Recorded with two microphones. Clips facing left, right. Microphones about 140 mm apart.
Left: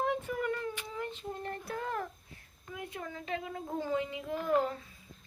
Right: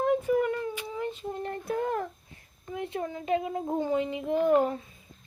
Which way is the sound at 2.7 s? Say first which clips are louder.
Right 8 dB; 30° right (ahead or behind).